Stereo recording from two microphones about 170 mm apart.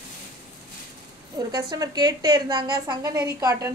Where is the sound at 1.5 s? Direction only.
25° right (ahead or behind).